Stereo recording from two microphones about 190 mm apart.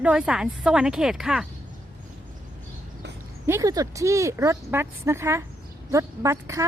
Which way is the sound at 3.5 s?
20° right (ahead or behind).